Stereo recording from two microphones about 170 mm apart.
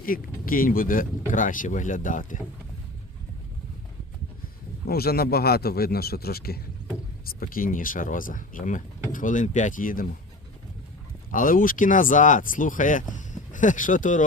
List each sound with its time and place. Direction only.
0.0 s a man's voice: 55° left (ahead or behind)
4.9 s a man's voice: 65° left (ahead or behind)
11.3 s speech: 55° left (ahead or behind)